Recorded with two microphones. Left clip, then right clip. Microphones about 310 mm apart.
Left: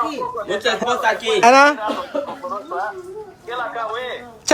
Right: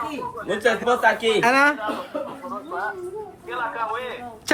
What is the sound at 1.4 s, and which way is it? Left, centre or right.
Speech, centre.